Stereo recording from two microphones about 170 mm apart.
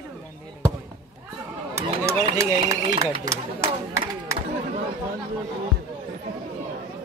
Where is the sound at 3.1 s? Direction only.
20° right (ahead or behind).